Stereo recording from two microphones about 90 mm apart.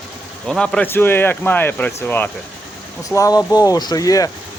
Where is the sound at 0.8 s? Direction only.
25° left (ahead or behind).